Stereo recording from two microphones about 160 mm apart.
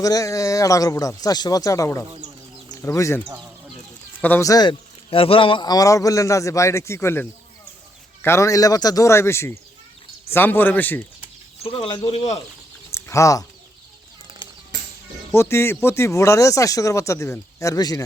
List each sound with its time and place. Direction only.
0.0 s a man's voice: 20° left (ahead or behind)
4.2 s a man's voice: 15° left (ahead or behind)
11.6 s speech: 30° left (ahead or behind)
12.1 s speech: 40° left (ahead or behind)
12.9 s a sound: 20° left (ahead or behind)
15.3 s speech: 15° left (ahead or behind)